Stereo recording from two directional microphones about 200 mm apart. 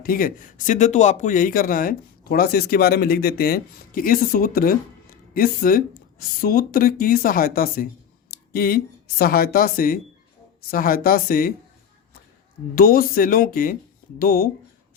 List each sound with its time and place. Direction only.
0.0 s speech: 45° left (ahead or behind)
12.7 s speech: 45° left (ahead or behind)